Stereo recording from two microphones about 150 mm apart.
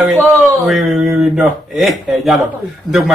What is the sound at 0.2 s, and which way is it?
Speech, 10° right (ahead or behind).